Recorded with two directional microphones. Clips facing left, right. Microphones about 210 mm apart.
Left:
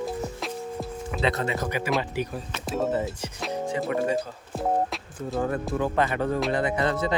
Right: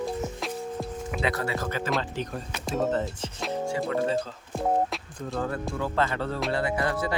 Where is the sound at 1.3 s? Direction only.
20° left (ahead or behind); by 3.5 s centre (ahead or behind).